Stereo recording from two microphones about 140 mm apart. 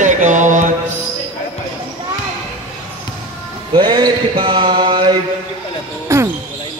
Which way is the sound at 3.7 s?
30° right (ahead or behind).